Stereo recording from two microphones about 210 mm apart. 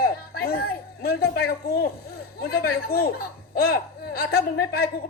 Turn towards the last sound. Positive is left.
turn(degrees=45)  # may be behind; listen again after turning